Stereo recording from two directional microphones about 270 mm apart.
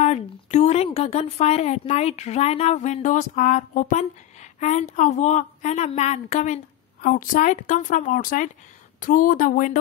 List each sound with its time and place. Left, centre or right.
0.0 s a woman's voice: left